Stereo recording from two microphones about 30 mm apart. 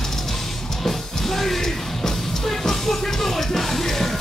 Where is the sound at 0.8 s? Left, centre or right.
Centre.